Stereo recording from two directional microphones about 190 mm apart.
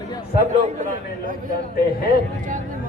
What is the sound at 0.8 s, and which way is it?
Speech, 45° right (ahead or behind).